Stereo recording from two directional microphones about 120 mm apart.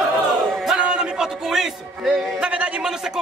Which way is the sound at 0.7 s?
10° right (ahead or behind).